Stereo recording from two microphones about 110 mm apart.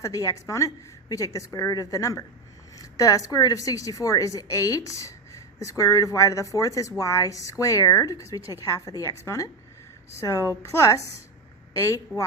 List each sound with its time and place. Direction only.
0.0 s a woman's voice: 30° left (ahead or behind)